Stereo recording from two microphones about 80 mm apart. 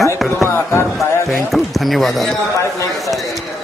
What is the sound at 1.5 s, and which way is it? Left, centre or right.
Speech, centre.